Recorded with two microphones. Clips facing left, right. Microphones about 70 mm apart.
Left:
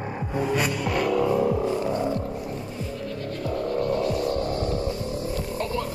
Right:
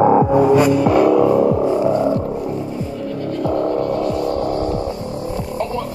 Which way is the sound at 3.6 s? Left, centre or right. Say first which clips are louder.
Right 4 dB; right.